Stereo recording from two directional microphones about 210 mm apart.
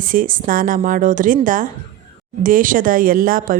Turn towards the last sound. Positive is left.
turn(degrees=-40)  # may be behind; listen again after turning